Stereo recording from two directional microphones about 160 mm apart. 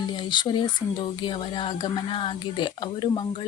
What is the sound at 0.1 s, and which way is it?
A woman's voice, 30° left (ahead or behind).